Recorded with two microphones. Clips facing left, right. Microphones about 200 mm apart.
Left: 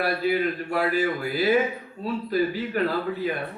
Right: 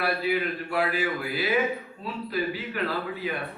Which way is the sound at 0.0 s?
40° left (ahead or behind).